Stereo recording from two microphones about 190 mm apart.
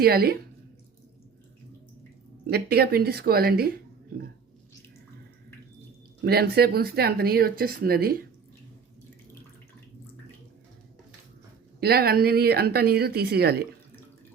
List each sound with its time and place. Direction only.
0.0 s a woman's voice: 55° right (ahead or behind)
2.5 s speech: 55° right (ahead or behind)
6.2 s speech: 55° right (ahead or behind)
11.8 s speech: 55° right (ahead or behind)